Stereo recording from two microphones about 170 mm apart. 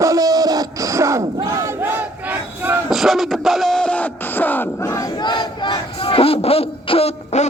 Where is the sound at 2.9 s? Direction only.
Centre (ahead or behind).